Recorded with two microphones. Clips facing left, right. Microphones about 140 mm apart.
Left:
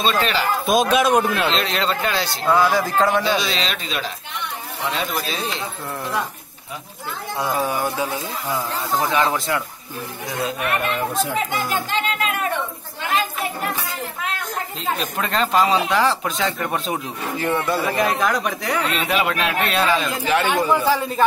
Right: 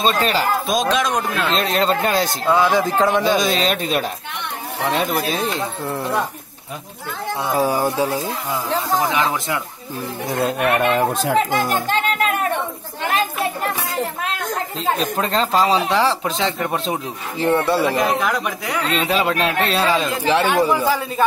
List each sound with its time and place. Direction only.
0.0 s speech: 40° right (ahead or behind)
0.8 s a man's voice: 5° left (ahead or behind)
1.5 s speech: 45° right (ahead or behind)
2.4 s speech: 20° right (ahead or behind)
3.3 s speech: 45° right (ahead or behind)
5.9 s speech: 25° right (ahead or behind)
7.4 s speech: 35° right (ahead or behind)
10.4 s speech: 65° right (ahead or behind)
11.5 s speech: 50° right (ahead or behind)
15.0 s speech: 30° right (ahead or behind)
17.9 s speech: 5° right (ahead or behind)
18.9 s speech: 30° right (ahead or behind)
20.4 s speech: 10° right (ahead or behind)